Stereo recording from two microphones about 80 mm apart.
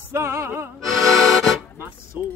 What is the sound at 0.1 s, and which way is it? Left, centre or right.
Music, right.